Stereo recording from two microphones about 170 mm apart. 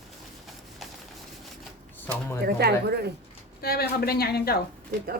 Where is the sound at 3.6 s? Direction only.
65° left (ahead or behind).